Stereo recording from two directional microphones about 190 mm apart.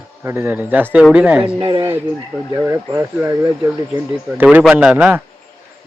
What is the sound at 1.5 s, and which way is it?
Speech, 25° right (ahead or behind).